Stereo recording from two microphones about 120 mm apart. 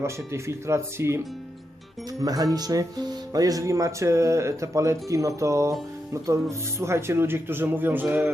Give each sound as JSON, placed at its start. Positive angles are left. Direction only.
{"t": 0.0, "sound": "speech", "side_deg": -25}
{"t": 2.2, "sound": "speech", "side_deg": -30}